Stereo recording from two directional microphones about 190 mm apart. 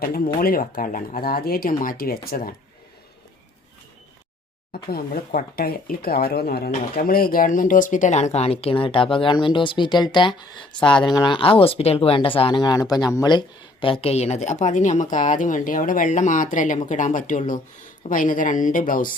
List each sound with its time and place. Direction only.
0.3 s speech: 50° left (ahead or behind)
4.7 s speech: 55° left (ahead or behind); by 13.4 s 20° left (ahead or behind)
13.8 s speech: 30° left (ahead or behind); by 19.1 s 45° left (ahead or behind)